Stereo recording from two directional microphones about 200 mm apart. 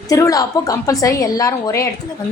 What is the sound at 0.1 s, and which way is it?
A woman's voice, 15° left (ahead or behind).